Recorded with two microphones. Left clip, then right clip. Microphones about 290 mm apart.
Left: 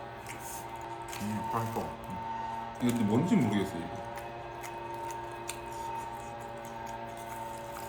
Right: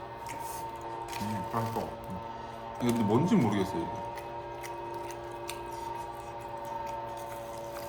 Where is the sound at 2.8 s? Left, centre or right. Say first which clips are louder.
Right 3 dB; centre.